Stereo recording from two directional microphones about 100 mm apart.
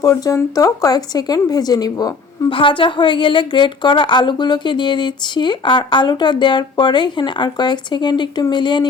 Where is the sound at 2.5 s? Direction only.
60° left (ahead or behind).